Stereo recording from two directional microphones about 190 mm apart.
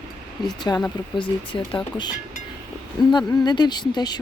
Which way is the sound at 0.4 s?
20° left (ahead or behind).